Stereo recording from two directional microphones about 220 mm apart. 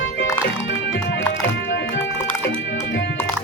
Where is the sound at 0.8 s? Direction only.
55° left (ahead or behind).